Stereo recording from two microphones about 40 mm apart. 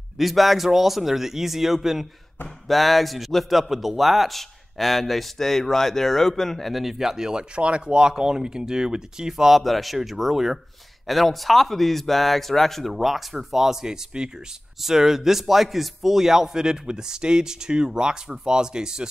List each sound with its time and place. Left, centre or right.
0.2 s a man's voice: centre
7.5 s a man's voice: right
9.5 s a man's voice: centre
14.1 s speech: right
14.8 s a man's voice: centre